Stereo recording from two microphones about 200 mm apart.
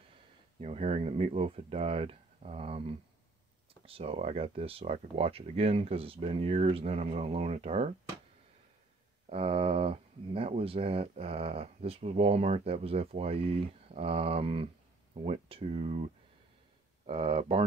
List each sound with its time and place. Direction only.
0.6 s speech: 30° right (ahead or behind)
9.3 s speech: 30° right (ahead or behind)